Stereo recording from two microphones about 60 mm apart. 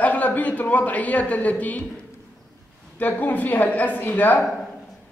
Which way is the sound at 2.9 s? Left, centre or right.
Left.